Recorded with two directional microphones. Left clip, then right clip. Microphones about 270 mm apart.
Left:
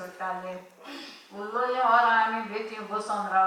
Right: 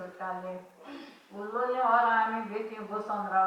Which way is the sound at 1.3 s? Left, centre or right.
Centre.